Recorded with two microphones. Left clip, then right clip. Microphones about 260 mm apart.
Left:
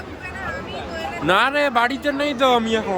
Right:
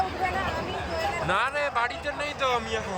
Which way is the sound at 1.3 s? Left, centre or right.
Left.